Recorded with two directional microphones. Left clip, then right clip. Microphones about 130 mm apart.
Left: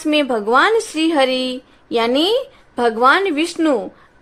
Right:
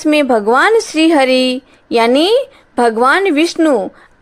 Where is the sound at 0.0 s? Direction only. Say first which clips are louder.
Right 6 dB; 45° right (ahead or behind).